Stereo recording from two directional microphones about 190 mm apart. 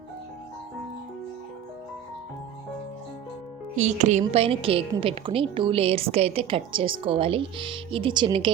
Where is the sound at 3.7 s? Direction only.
40° right (ahead or behind).